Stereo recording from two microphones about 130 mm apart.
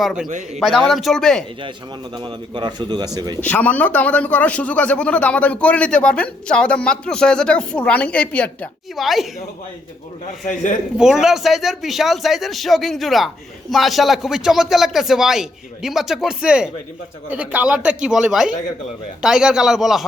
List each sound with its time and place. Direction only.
0.0 s speech: 5° right (ahead or behind)
0.3 s a man's voice: 70° right (ahead or behind)
0.6 s speech: centre (ahead or behind)
2.1 s a man's voice: 35° right (ahead or behind)
3.4 s a man's voice: 10° left (ahead or behind)
10.4 s a man's voice: 80° left
10.9 s speech: 5° right (ahead or behind)